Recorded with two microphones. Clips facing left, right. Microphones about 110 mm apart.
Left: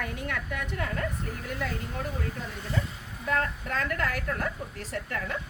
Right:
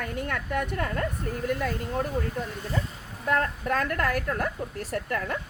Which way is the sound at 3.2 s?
45° right (ahead or behind).